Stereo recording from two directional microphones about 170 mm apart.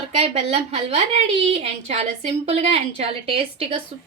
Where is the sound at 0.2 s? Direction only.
40° right (ahead or behind).